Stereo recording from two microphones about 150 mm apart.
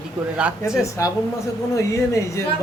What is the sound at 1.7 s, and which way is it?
Speech, 20° left (ahead or behind).